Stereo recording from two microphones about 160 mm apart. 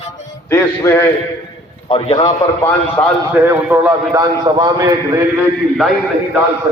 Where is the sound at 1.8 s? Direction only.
35° left (ahead or behind).